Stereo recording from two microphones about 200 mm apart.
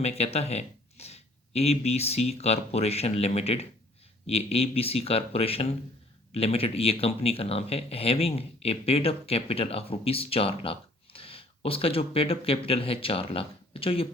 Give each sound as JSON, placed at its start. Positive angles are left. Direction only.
{"t": 0.0, "sound": "speech", "side_deg": 30}